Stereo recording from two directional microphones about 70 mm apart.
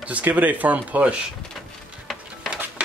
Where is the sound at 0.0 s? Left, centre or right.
Right.